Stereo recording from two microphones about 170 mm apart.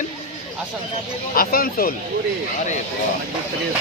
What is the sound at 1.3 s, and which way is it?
Speech, 60° left (ahead or behind).